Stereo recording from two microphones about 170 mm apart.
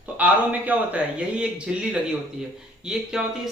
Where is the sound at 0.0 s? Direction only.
10° right (ahead or behind).